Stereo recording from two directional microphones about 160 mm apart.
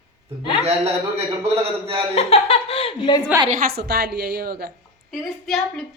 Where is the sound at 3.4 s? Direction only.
60° right (ahead or behind).